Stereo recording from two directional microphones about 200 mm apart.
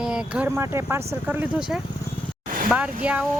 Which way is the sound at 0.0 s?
5° right (ahead or behind).